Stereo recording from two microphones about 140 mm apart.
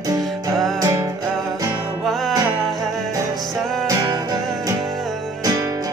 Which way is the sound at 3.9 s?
25° right (ahead or behind).